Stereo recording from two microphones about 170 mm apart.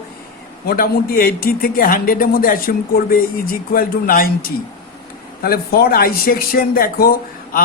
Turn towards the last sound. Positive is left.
turn(degrees=60)  # may be behind; listen again after turning